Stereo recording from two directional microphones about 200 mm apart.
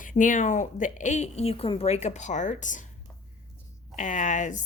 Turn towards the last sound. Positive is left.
turn(degrees=40)  # may be behind; listen again after turning